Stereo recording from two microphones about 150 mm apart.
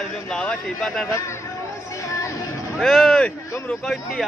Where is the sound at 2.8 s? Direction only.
Centre (ahead or behind).